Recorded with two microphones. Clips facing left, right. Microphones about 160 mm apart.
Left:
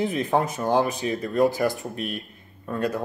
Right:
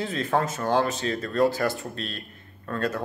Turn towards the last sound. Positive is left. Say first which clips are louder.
# left 2 dB
turn(degrees=15)  # may be behind; listen again after turning